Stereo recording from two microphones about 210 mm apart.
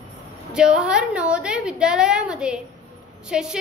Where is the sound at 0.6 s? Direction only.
5° right (ahead or behind).